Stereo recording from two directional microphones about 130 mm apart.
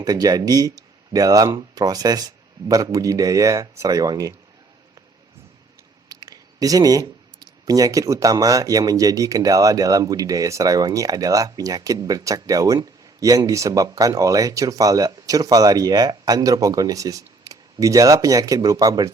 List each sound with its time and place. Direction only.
0.0 s speech: 30° right (ahead or behind)
6.1 s speech: 30° right (ahead or behind)